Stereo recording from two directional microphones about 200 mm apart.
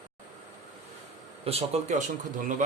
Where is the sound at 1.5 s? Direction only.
30° right (ahead or behind).